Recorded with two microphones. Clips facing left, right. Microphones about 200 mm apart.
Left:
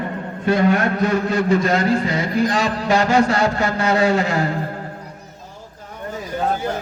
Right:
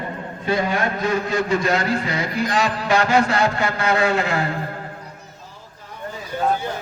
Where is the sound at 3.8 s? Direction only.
35° left (ahead or behind).